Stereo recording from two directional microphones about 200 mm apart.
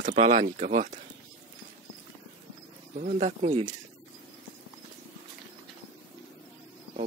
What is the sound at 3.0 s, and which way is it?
Speech, 40° right (ahead or behind).